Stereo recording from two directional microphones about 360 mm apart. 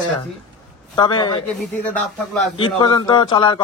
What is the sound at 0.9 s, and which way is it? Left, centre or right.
Speech, centre.